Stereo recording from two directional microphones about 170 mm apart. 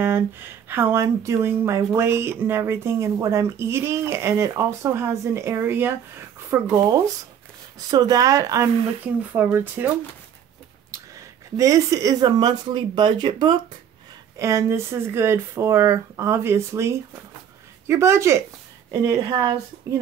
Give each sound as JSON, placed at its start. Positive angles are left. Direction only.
{"t": 0.0, "sound": "speech", "side_deg": -15}
{"t": 11.5, "sound": "speech", "side_deg": -20}